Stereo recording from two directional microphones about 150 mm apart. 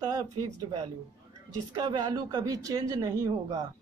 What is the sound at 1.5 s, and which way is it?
Speech, 30° right (ahead or behind).